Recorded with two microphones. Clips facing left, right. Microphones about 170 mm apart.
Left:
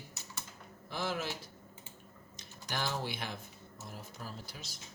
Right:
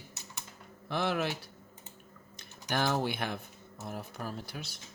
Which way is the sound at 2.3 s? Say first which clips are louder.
Right 7 dB; 55° right (ahead or behind).